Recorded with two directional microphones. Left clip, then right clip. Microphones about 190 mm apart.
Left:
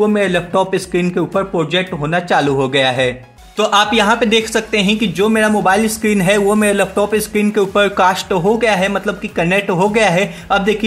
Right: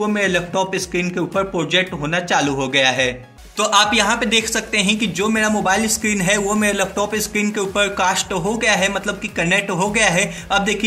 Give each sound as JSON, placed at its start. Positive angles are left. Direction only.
{"t": 0.0, "sound": "a man's voice", "side_deg": 45}